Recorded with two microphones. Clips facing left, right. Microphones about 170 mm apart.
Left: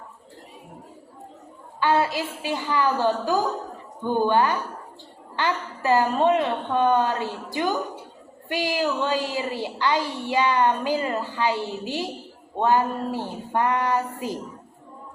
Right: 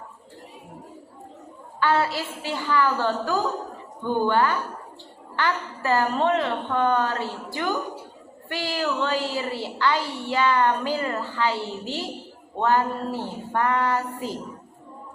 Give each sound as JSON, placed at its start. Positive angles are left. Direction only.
{"t": 1.8, "sound": "a woman's voice", "side_deg": 15}